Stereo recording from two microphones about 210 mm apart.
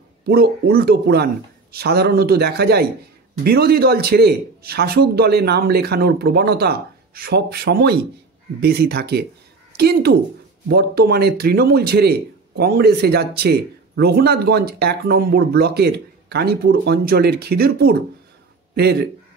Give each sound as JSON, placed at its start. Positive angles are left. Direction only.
{"t": 0.2, "sound": "a man's voice", "side_deg": -45}